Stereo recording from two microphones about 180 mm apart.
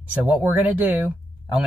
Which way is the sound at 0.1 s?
10° right (ahead or behind).